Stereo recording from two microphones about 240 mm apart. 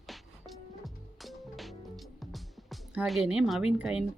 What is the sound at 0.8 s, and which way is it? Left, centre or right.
Music, centre.